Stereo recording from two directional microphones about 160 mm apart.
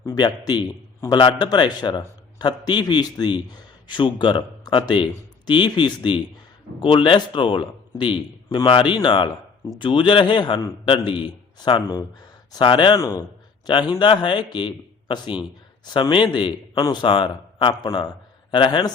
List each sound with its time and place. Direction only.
0.0 s a man's voice: 25° left (ahead or behind)
13.0 s a man's voice: 20° left (ahead or behind)
13.7 s a man's voice: 30° left (ahead or behind)